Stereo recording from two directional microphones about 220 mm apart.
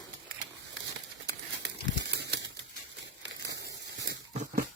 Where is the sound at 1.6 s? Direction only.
50° right (ahead or behind).